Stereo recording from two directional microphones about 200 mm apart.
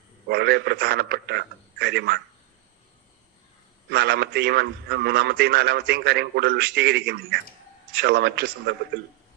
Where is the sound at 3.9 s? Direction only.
55° right (ahead or behind).